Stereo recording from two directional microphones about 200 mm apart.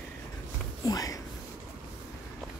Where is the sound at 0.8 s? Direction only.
15° left (ahead or behind).